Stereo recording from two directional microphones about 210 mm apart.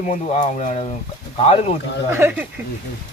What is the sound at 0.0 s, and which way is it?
Speech, 35° left (ahead or behind).